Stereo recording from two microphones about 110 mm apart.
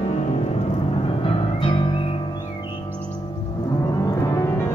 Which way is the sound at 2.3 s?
40° left (ahead or behind).